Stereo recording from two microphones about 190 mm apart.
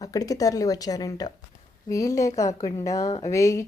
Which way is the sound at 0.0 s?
20° left (ahead or behind).